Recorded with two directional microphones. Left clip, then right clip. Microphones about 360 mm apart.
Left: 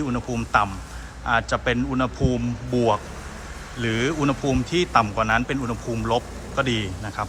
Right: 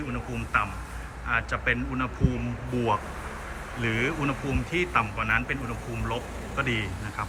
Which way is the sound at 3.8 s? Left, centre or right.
Centre.